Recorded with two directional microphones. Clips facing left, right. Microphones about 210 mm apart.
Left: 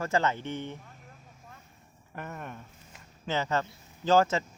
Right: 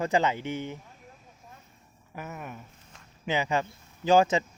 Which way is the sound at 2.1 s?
5° right (ahead or behind).